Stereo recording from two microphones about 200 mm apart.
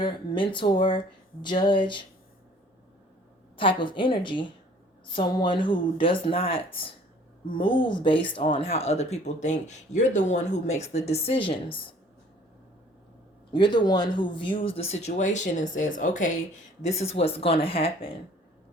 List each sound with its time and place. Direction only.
0.0 s speech: 25° left (ahead or behind)
3.6 s speech: 25° left (ahead or behind)
7.6 s speech: 25° left (ahead or behind)
13.5 s speech: 20° left (ahead or behind)